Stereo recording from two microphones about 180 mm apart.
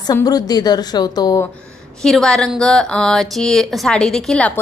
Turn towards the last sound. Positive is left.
turn(degrees=5)  # may be behind; listen again after turning